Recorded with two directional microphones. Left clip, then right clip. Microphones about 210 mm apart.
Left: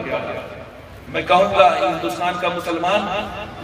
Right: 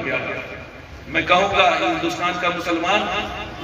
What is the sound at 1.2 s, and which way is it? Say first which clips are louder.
A man's voice: left 3 dB; 20° left (ahead or behind).